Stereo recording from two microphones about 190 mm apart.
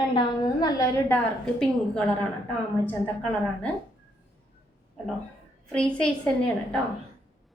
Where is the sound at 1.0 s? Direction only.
10° left (ahead or behind).